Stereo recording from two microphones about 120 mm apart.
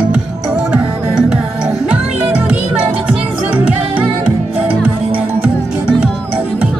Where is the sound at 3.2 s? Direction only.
15° right (ahead or behind).